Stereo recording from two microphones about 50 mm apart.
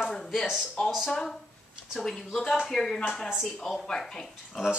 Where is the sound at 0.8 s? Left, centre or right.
Centre.